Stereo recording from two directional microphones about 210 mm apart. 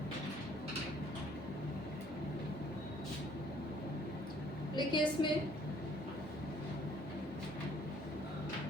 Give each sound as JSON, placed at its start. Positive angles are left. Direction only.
{"t": 4.7, "sound": "a woman's voice", "side_deg": 20}